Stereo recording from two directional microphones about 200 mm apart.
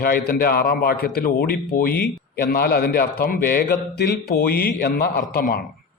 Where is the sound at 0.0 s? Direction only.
50° left (ahead or behind).